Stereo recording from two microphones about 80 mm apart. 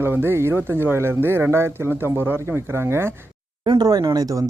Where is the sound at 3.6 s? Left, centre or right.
Right.